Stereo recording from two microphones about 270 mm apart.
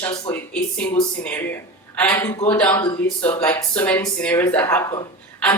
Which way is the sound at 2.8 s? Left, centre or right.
Left.